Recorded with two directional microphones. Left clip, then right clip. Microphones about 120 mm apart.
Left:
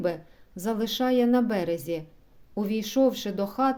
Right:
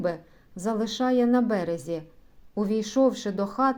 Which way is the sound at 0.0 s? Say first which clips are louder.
Even; 20° left (ahead or behind).